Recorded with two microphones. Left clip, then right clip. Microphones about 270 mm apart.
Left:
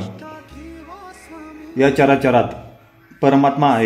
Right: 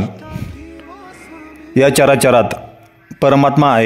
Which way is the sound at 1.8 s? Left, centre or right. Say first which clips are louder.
Right 4 dB; right.